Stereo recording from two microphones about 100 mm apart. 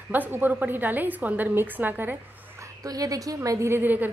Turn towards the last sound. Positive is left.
turn(degrees=-20)  # may be behind; listen again after turning